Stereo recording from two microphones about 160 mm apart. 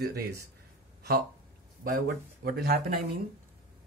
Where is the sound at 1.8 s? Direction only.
70° right (ahead or behind).